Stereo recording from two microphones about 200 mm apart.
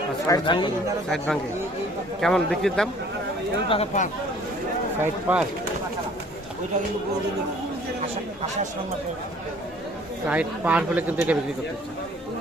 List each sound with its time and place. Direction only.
0.3 s speech: 20° left (ahead or behind)
2.2 s speech: centre (ahead or behind)
3.7 s speech: 35° left (ahead or behind)
4.9 s speech: 5° right (ahead or behind)
10.2 s speech: 5° right (ahead or behind)